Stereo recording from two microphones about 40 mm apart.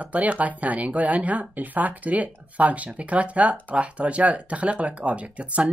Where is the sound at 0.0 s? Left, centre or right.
Right.